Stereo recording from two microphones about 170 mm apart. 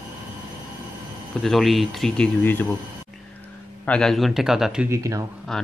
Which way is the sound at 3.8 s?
5° left (ahead or behind).